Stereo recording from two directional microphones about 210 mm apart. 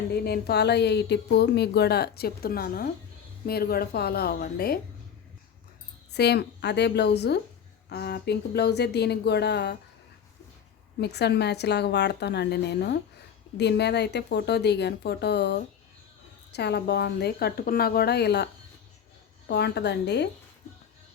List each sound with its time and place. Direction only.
0.1 s a woman's voice: 50° left (ahead or behind)
6.1 s a woman's voice: 50° left (ahead or behind)
11.0 s a woman's voice: 50° left (ahead or behind)
19.5 s a woman's voice: 50° left (ahead or behind)